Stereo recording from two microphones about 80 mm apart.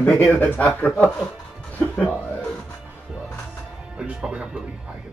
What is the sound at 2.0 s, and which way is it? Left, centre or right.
Music, left.